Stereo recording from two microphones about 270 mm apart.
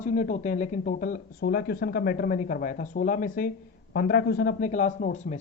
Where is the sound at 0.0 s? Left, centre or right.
Left.